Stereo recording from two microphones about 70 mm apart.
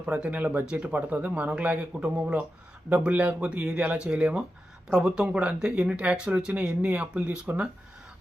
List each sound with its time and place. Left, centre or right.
0.0 s speech: centre